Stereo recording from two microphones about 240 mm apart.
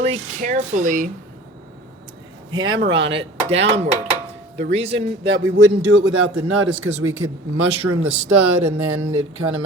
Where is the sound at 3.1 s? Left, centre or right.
Right.